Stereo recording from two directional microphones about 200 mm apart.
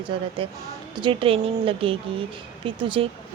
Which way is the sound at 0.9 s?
25° right (ahead or behind).